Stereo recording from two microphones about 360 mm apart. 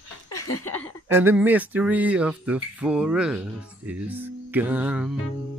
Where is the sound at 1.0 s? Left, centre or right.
Centre.